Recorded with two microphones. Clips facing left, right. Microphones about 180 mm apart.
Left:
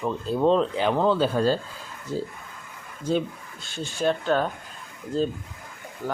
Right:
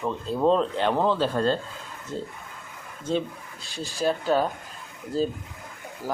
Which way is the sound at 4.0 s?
5° right (ahead or behind).